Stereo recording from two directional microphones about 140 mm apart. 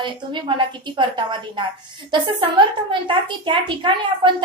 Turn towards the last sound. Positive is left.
turn(degrees=-35)  # may be behind; listen again after turning